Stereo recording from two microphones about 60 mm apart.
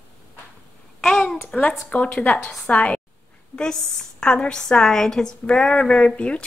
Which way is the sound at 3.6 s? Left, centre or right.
Centre.